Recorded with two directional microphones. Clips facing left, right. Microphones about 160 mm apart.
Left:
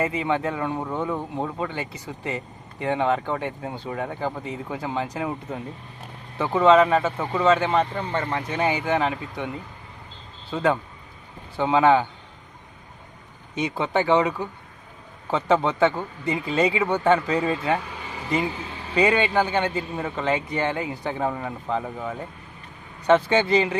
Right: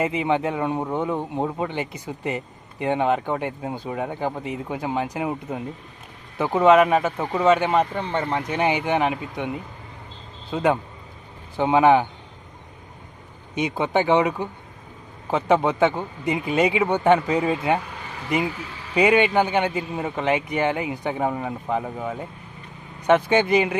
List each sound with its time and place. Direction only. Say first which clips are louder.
0.0 s a man's voice: right 2 dB; 20° right (ahead or behind)
13.6 s a man's voice: right 2 dB; 15° right (ahead or behind)
18.9 s a man's voice: right 2 dB; 15° right (ahead or behind)